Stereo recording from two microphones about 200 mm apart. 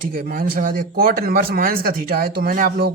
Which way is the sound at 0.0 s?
45° right (ahead or behind).